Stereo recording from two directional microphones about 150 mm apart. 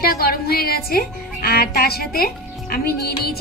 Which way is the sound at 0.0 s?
85° left.